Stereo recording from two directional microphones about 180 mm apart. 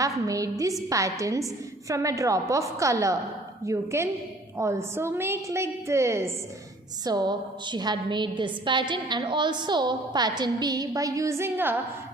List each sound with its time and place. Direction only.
0.3 s a woman's voice: 20° right (ahead or behind)